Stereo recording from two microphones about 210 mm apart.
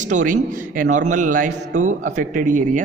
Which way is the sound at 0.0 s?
35° right (ahead or behind).